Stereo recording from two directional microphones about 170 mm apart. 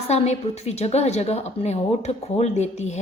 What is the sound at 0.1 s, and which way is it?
A woman's voice, 40° left (ahead or behind).